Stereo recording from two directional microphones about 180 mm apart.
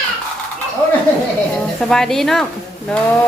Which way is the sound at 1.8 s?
5° left (ahead or behind).